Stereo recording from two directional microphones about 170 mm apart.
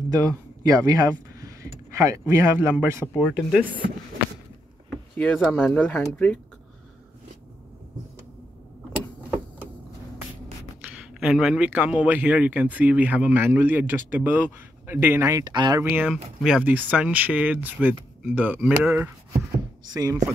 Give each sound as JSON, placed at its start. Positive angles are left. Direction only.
{"t": 0.7, "sound": "speech", "side_deg": -20}
{"t": 3.1, "sound": "speech", "side_deg": 0}
{"t": 4.8, "sound": "speech", "side_deg": 5}
{"t": 11.1, "sound": "a man's voice", "side_deg": -5}
{"t": 15.8, "sound": "a man's voice", "side_deg": -10}